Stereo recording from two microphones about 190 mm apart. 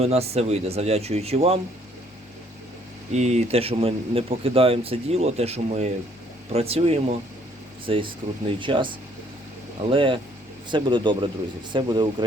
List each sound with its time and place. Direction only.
0.0 s speech: 35° right (ahead or behind)
3.1 s speech: 35° right (ahead or behind)